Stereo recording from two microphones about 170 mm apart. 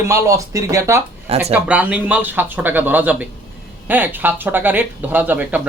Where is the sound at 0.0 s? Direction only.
15° right (ahead or behind).